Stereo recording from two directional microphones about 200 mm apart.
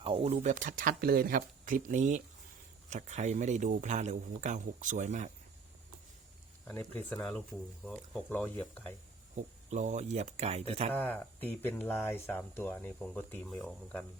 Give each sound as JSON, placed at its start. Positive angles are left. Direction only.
{"t": 0.0, "sound": "a man's voice", "side_deg": -25}
{"t": 6.7, "sound": "speech", "side_deg": 10}
{"t": 9.3, "sound": "a man's voice", "side_deg": -35}
{"t": 10.9, "sound": "speech", "side_deg": 10}